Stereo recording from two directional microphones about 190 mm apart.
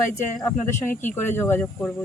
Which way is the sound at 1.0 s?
10° left (ahead or behind).